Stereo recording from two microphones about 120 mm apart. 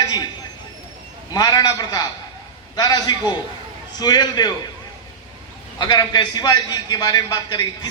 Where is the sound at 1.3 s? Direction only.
35° left (ahead or behind).